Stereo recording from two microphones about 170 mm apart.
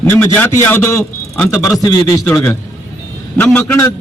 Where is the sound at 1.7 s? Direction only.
20° left (ahead or behind).